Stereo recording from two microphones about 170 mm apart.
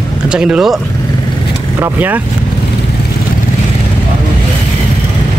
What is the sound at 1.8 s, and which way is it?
Speech, 10° right (ahead or behind).